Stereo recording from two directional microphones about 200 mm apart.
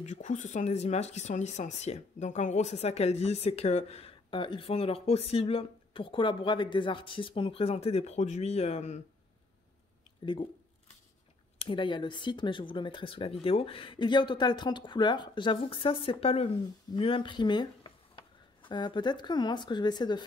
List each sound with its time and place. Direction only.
0.0 s speech: 35° left (ahead or behind)
11.5 s speech: 25° left (ahead or behind)